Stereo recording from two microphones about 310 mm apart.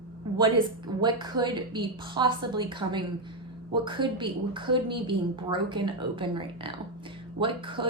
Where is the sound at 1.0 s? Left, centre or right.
Centre.